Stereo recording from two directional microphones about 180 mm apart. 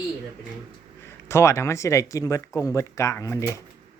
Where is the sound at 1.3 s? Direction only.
15° left (ahead or behind).